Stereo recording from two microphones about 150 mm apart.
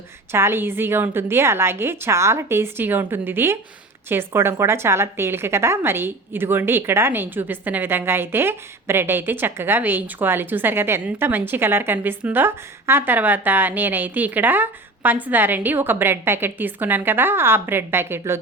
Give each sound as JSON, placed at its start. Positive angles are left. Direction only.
{"t": 0.3, "sound": "a woman's voice", "side_deg": -15}